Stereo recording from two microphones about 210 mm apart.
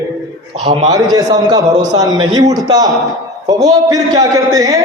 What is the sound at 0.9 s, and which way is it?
A man's voice, 15° right (ahead or behind).